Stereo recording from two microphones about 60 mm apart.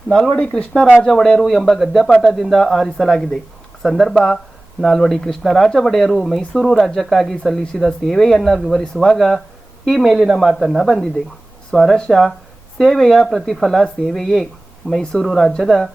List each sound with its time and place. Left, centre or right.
0.1 s speech: centre
11.7 s speech: centre